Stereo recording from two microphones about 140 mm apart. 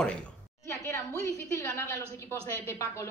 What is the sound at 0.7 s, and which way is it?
Speech, 20° left (ahead or behind).